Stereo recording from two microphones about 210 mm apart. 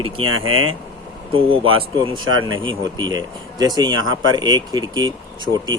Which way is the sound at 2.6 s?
20° right (ahead or behind).